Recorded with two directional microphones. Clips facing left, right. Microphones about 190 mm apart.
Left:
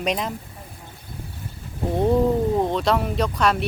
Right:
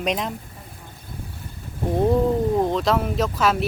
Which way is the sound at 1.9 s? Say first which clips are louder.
Even; centre (ahead or behind).